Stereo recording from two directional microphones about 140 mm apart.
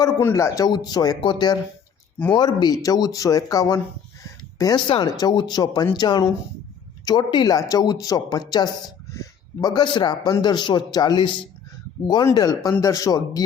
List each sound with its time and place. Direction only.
0.0 s a man's voice: 20° left (ahead or behind)